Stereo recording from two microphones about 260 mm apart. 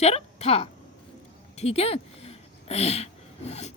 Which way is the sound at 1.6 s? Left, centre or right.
Left.